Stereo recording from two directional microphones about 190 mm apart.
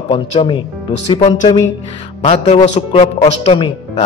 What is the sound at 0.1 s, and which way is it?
A man's voice, 30° left (ahead or behind).